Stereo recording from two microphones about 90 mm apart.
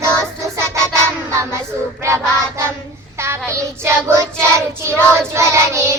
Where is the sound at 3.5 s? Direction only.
30° right (ahead or behind).